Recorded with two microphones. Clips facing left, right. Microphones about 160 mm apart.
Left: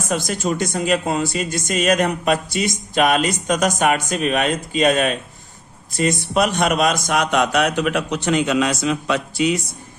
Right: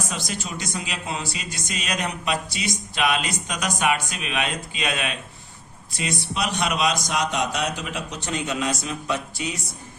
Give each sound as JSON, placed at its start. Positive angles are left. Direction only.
{"t": 0.1, "sound": "speech", "side_deg": 50}
{"t": 6.3, "sound": "a man's voice", "side_deg": 50}